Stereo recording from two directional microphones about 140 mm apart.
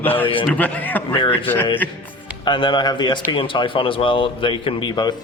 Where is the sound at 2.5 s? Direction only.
35° left (ahead or behind).